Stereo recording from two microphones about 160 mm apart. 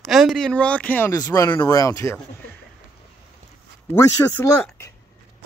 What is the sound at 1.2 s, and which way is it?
Speech, 20° left (ahead or behind).